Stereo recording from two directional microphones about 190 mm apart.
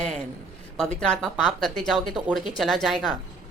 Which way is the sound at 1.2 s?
Centre (ahead or behind).